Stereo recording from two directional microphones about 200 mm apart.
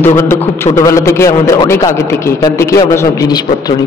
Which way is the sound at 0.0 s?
10° left (ahead or behind).